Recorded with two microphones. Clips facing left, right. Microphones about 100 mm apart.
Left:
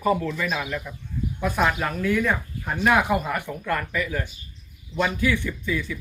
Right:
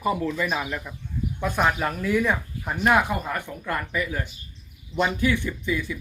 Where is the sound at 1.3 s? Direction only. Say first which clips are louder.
Even; 5° left (ahead or behind).